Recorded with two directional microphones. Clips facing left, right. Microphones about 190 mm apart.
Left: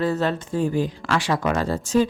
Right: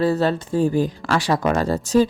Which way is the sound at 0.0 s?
35° right (ahead or behind).